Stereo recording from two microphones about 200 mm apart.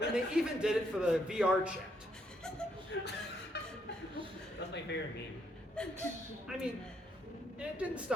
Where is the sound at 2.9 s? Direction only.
65° left (ahead or behind).